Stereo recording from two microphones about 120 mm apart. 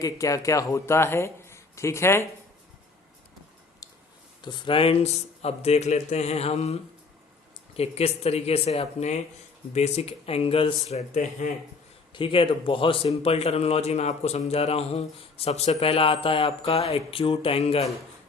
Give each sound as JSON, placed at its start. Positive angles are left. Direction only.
{"t": 0.0, "sound": "speech", "side_deg": 30}
{"t": 3.8, "sound": "a sound", "side_deg": 30}
{"t": 4.4, "sound": "a man's voice", "side_deg": 40}
{"t": 12.1, "sound": "a man's voice", "side_deg": 45}